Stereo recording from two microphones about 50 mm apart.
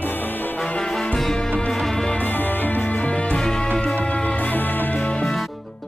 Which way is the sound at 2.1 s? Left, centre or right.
Left.